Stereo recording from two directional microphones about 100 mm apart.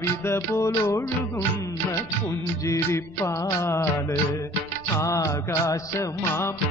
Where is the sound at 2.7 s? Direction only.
25° left (ahead or behind).